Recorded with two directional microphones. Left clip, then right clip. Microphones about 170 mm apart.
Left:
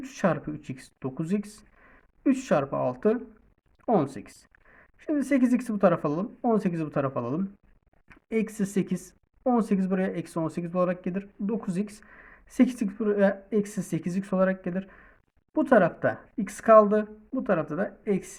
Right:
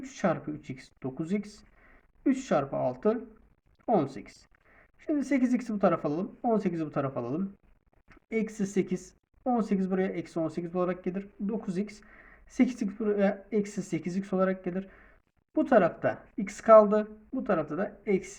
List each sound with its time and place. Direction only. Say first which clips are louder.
0.0 s speech: left 3 dB; 45° left (ahead or behind)